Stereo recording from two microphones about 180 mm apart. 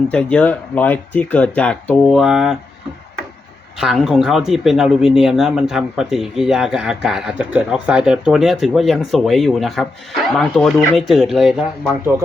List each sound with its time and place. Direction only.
0.1 s speech: 5° left (ahead or behind)
3.8 s speech: centre (ahead or behind)